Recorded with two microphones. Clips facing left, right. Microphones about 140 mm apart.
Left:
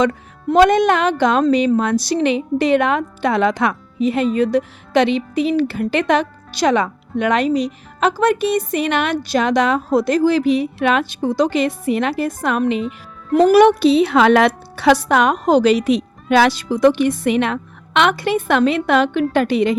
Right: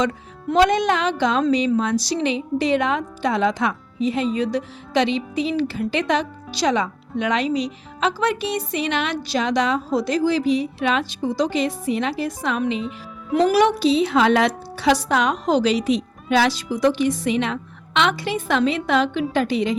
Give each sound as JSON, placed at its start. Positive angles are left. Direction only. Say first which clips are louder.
{"t": 0.0, "sound": "speech", "louder": "left 5 dB", "side_deg": 55}